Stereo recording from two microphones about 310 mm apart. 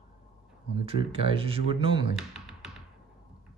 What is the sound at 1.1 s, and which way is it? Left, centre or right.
Speech, centre.